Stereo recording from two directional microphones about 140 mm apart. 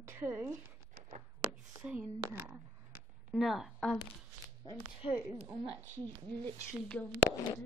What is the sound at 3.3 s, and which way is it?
Speech, 5° right (ahead or behind).